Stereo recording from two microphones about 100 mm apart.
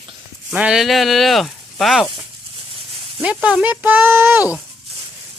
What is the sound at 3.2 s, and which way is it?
Speech, 10° right (ahead or behind).